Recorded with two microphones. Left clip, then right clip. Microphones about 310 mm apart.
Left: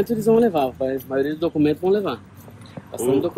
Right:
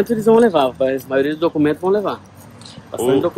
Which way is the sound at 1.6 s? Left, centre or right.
Centre.